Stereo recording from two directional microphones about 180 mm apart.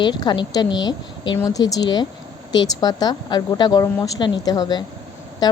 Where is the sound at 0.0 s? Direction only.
25° left (ahead or behind).